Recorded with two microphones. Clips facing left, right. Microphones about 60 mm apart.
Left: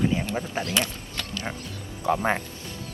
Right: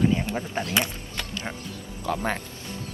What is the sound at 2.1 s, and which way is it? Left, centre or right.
Speech, left.